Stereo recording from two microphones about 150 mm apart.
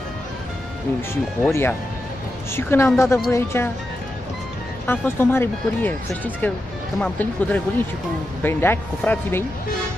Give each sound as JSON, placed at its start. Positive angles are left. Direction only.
{"t": 1.5, "sound": "speech", "side_deg": 15}
{"t": 4.8, "sound": "speech", "side_deg": 15}